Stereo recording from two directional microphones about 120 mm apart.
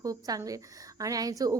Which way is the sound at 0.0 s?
30° right (ahead or behind).